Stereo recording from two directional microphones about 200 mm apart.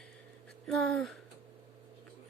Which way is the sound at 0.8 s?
Centre (ahead or behind).